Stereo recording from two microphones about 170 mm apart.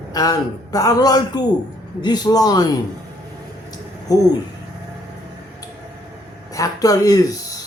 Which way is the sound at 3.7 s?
20° left (ahead or behind).